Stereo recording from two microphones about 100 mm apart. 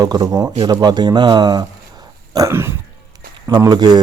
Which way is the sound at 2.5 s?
25° right (ahead or behind).